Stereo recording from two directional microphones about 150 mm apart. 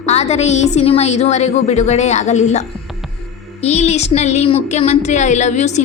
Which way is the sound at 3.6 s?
45° left (ahead or behind).